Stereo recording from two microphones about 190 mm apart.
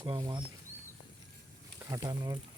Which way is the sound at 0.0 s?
25° right (ahead or behind).